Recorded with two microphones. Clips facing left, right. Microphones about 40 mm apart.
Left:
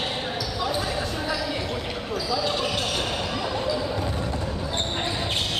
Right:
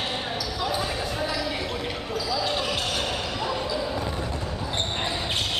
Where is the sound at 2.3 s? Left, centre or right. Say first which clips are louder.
Left 1 dB; centre.